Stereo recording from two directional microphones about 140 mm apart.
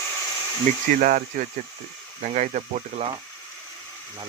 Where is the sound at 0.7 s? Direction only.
70° right (ahead or behind).